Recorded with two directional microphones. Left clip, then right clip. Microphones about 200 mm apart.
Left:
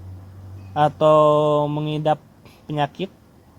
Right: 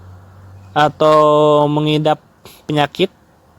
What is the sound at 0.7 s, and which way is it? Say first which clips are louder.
Speech: right 4 dB; 50° right (ahead or behind).